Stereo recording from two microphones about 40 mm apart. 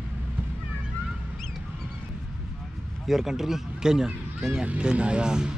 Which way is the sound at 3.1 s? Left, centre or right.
Centre.